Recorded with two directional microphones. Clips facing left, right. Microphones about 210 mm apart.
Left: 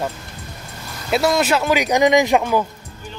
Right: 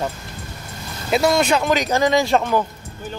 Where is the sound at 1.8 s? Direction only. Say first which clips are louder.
Left 3 dB; 15° left (ahead or behind).